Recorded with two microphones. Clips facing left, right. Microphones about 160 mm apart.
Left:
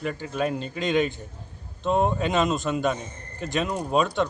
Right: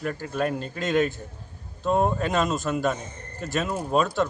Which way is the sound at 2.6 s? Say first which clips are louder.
Even; 20° left (ahead or behind).